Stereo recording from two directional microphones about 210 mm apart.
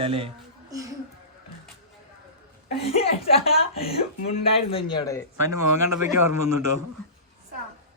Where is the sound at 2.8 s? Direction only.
30° left (ahead or behind).